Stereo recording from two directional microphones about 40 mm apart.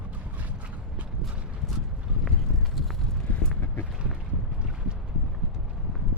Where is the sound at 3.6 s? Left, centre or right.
Left.